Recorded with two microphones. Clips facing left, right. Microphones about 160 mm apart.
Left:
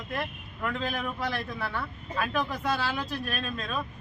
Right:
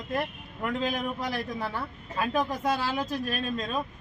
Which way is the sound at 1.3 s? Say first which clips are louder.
Right 1 dB; 40° right (ahead or behind).